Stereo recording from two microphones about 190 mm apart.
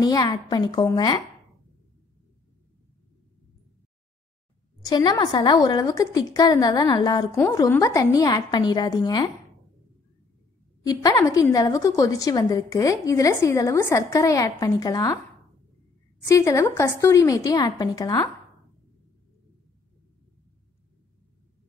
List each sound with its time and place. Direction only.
0.0 s a woman's voice: 20° left (ahead or behind)
4.8 s a woman's voice: 20° left (ahead or behind)
10.9 s a woman's voice: 20° left (ahead or behind)
16.3 s a woman's voice: 15° left (ahead or behind)